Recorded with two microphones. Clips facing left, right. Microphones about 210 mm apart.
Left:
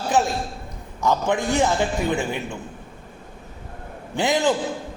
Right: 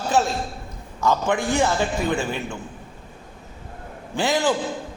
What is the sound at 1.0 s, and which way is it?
A man's voice, 15° left (ahead or behind).